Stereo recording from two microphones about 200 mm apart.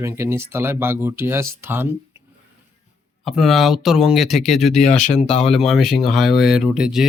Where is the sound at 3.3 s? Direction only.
Centre (ahead or behind).